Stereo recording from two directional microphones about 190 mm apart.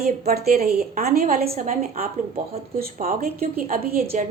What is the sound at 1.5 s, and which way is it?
A woman's voice, 40° right (ahead or behind).